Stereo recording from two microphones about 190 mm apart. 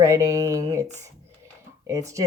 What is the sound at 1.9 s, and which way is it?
Speech, 15° right (ahead or behind).